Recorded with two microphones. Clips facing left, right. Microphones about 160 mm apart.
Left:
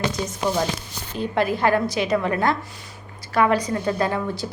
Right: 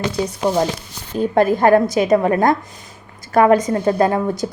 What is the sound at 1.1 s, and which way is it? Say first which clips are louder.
A woman's voice: right 7 dB; 45° right (ahead or behind).